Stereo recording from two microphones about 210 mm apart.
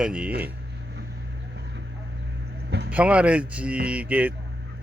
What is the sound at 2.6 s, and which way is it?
Vehicle, 55° right (ahead or behind).